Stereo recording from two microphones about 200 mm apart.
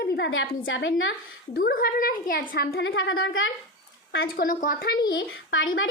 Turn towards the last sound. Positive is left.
turn(degrees=75)  # may be behind; listen again after turning